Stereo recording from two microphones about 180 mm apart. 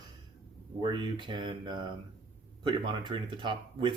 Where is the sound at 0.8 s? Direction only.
25° right (ahead or behind).